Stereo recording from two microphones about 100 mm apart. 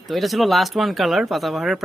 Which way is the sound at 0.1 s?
Centre (ahead or behind).